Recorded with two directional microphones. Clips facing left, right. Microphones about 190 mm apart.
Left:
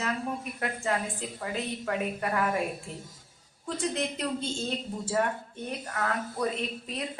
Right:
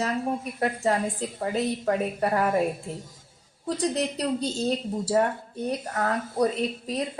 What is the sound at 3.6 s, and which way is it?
A woman's voice, 35° right (ahead or behind).